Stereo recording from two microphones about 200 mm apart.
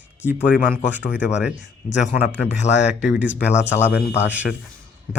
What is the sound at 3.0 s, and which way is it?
Speech, 5° right (ahead or behind).